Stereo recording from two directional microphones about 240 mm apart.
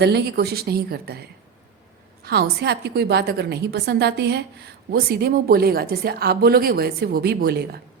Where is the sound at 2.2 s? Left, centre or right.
Right.